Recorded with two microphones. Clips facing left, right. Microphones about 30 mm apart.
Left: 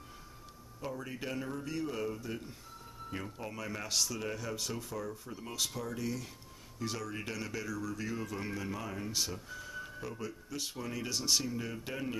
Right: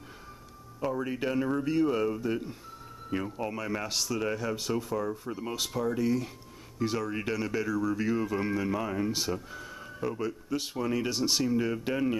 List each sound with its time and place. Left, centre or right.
0.9 s speech: right